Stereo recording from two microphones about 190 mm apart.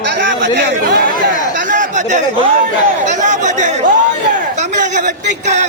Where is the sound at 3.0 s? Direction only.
40° right (ahead or behind).